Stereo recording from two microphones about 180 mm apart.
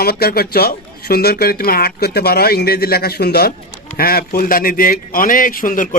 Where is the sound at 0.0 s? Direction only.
60° left (ahead or behind).